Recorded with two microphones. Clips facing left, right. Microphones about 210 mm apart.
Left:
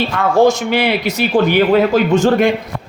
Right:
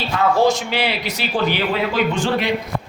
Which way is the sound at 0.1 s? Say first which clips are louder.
Left 2 dB; 55° left (ahead or behind).